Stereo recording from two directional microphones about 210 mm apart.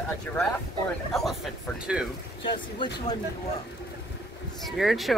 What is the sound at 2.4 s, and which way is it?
Speech, 20° left (ahead or behind).